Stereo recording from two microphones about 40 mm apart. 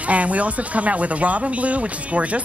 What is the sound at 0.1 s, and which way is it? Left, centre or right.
Speech, right.